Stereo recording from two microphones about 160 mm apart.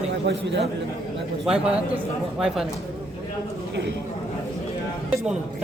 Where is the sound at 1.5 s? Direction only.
5° right (ahead or behind).